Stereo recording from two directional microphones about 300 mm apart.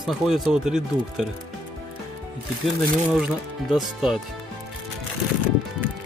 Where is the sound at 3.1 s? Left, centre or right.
Centre.